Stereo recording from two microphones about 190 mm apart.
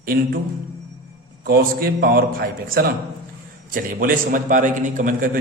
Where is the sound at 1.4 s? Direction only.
50° right (ahead or behind).